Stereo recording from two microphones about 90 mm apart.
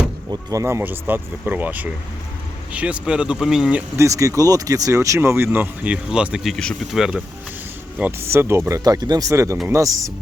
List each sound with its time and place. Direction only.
0.3 s speech: 35° right (ahead or behind)
0.8 s speech: 20° right (ahead or behind)
3.9 s speech: 35° right (ahead or behind); by 7.2 s 5° right (ahead or behind)
8.2 s speech: 30° right (ahead or behind)
8.8 s speech: 45° right (ahead or behind)
9.3 s speech: 30° right (ahead or behind)